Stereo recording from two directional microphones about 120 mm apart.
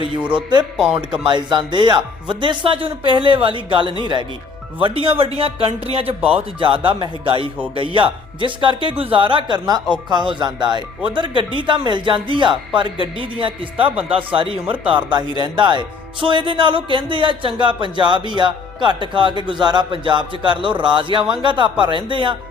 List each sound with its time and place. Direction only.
1.2 s speech: 40° right (ahead or behind)
4.8 s speech: 50° right (ahead or behind)